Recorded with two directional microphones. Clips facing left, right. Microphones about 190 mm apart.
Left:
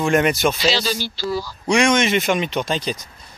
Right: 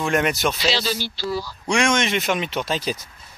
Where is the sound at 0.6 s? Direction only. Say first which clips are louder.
Left 2 dB; 40° left (ahead or behind).